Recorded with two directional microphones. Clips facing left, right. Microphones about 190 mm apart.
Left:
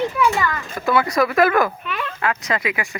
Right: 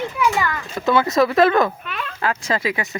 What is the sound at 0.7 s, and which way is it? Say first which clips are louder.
Speech: right 2 dB; 25° right (ahead or behind).